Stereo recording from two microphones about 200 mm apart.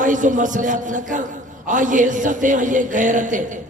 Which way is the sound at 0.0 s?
40° right (ahead or behind).